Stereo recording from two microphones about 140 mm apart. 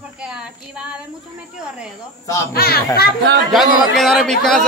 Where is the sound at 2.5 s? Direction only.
90° left.